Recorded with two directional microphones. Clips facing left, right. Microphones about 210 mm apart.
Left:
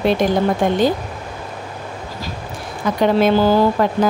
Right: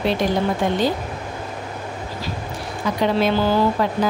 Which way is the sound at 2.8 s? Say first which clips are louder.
Left 4 dB; 50° left (ahead or behind).